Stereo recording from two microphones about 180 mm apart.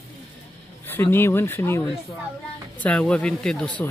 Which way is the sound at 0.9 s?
10° left (ahead or behind).